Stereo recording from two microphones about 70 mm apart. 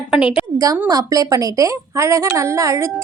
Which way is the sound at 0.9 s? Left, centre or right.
Right.